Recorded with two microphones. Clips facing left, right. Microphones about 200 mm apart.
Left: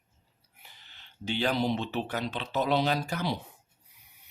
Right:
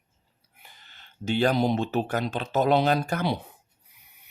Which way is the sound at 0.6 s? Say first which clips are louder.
Right 3 dB; 50° right (ahead or behind).